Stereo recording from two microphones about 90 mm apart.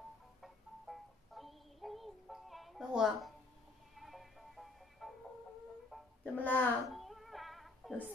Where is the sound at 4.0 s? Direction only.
Centre (ahead or behind).